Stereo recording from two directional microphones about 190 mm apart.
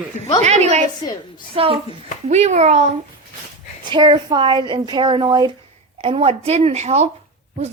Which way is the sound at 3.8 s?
25° right (ahead or behind).